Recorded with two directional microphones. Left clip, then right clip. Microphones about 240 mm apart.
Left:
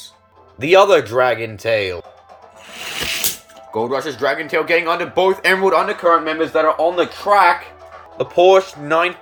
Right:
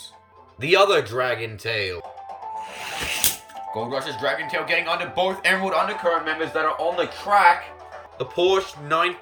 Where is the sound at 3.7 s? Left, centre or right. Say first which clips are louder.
Left 7 dB; centre.